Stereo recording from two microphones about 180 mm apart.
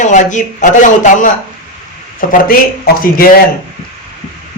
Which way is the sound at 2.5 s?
55° left (ahead or behind).